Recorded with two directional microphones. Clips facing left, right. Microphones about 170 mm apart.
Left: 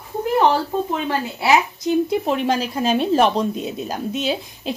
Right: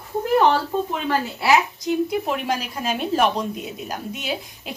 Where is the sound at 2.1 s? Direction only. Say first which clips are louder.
Left 4 dB; 30° left (ahead or behind).